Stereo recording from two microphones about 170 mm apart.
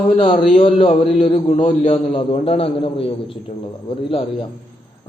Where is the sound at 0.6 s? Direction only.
35° left (ahead or behind).